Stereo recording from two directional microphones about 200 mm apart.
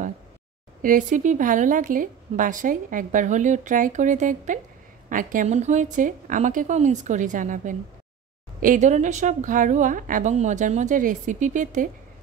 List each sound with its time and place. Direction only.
0.8 s a woman's voice: 40° right (ahead or behind)